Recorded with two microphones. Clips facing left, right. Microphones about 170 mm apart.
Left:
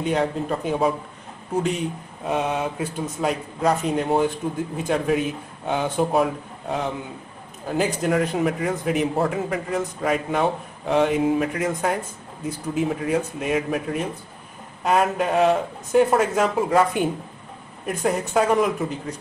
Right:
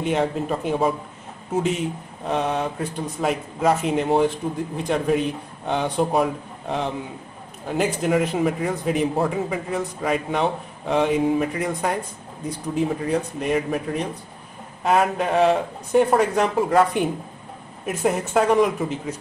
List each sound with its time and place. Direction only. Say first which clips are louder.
0.0 s a man's voice: right 1 dB; centre (ahead or behind)